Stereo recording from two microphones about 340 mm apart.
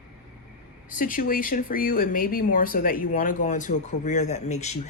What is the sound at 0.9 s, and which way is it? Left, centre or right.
Speech, left.